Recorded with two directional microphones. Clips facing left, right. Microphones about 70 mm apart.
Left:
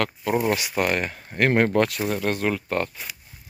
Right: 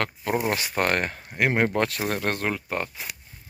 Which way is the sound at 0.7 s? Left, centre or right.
Right.